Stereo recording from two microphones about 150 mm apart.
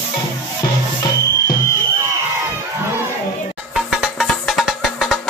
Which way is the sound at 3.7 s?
Centre (ahead or behind).